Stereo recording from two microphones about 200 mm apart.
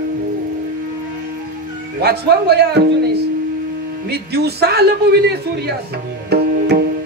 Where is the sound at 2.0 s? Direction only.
55° right (ahead or behind).